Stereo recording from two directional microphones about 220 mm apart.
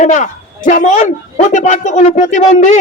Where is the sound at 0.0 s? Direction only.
35° left (ahead or behind).